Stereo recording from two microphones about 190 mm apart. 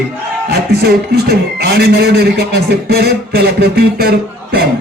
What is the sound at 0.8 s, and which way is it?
A man's voice, 55° right (ahead or behind).